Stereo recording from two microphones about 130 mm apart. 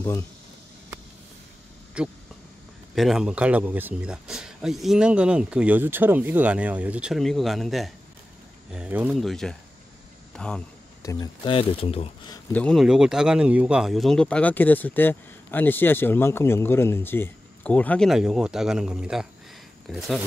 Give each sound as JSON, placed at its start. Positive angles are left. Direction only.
{"t": 2.0, "sound": "speech", "side_deg": -10}
{"t": 8.7, "sound": "speech", "side_deg": -10}
{"t": 9.1, "sound": "speech", "side_deg": 0}
{"t": 11.0, "sound": "a sound", "side_deg": 25}
{"t": 11.4, "sound": "speech", "side_deg": 45}
{"t": 12.5, "sound": "speech", "side_deg": 10}
{"t": 12.8, "sound": "speech", "side_deg": -5}